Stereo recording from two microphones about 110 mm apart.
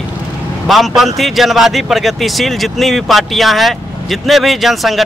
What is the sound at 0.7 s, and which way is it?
Speech, centre (ahead or behind).